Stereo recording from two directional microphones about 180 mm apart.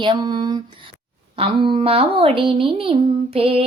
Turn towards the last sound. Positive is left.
turn(degrees=-30)  # may be behind; listen again after turning